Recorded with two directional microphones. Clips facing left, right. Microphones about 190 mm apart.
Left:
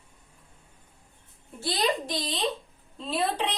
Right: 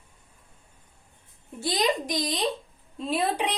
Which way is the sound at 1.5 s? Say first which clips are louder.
Right 2 dB; 15° right (ahead or behind).